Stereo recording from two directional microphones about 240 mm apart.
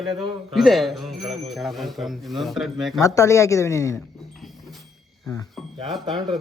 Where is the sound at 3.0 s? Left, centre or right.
Centre.